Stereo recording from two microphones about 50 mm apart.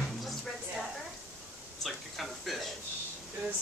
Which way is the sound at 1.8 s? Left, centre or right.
Centre.